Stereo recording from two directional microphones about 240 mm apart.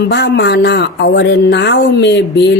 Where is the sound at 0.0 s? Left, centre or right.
Left.